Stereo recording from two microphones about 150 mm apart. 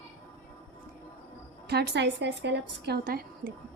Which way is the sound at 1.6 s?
90° right.